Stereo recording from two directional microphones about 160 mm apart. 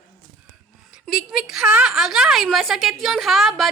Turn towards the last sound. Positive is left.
turn(degrees=0)  # may be behind; listen again after turning